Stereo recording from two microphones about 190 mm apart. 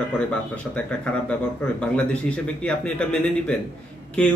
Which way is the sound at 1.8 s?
5° left (ahead or behind).